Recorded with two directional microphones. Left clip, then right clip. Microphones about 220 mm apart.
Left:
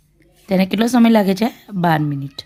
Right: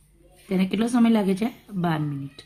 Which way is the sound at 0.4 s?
50° left (ahead or behind).